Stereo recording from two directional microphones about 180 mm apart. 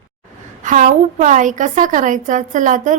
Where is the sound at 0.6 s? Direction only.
45° right (ahead or behind).